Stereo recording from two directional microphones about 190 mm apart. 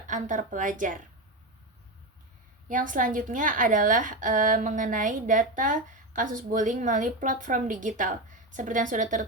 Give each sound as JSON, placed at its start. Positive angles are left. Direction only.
{"t": 0.1, "sound": "a woman's voice", "side_deg": -40}
{"t": 2.6, "sound": "a woman's voice", "side_deg": -45}